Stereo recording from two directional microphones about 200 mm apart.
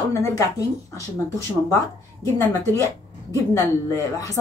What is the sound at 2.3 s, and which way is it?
Speech, 15° left (ahead or behind).